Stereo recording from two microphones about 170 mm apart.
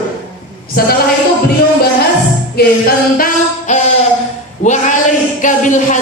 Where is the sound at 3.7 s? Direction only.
45° left (ahead or behind).